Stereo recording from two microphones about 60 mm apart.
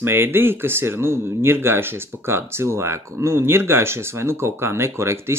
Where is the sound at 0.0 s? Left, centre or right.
Right.